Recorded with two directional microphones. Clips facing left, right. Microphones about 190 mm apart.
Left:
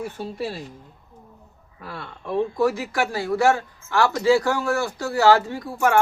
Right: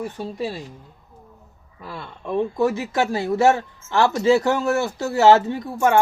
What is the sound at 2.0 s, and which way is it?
Speech, 20° right (ahead or behind).